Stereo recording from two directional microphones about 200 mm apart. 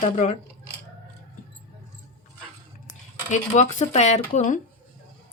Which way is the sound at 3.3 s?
35° left (ahead or behind).